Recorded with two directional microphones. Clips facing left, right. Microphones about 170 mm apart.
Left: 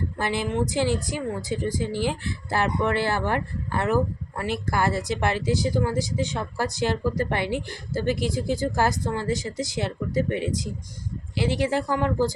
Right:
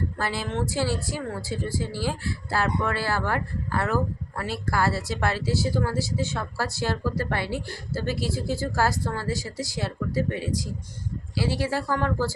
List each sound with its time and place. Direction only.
0.2 s speech: 20° left (ahead or behind)